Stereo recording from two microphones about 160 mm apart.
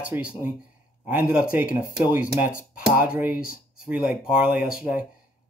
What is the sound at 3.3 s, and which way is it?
Speech, 65° left (ahead or behind).